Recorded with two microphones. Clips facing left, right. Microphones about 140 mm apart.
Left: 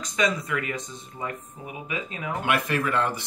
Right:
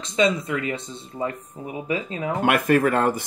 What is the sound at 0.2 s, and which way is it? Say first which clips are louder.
Speech: right 5 dB; 25° right (ahead or behind).